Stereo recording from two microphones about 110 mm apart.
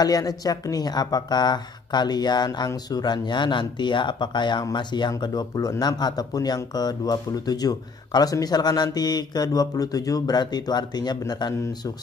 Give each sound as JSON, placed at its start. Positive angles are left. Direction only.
{"t": 0.0, "sound": "speech", "side_deg": 35}